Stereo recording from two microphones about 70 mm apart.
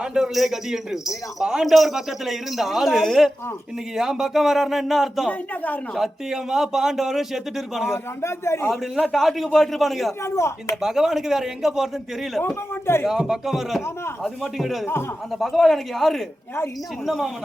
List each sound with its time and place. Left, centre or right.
0.0 s a man's voice: centre
5.3 s a woman's voice: left
5.9 s a man's voice: centre
8.2 s a man's voice: left
9.1 s a man's voice: centre
10.2 s speech: left
10.8 s a man's voice: centre
13.1 s a man's voice: centre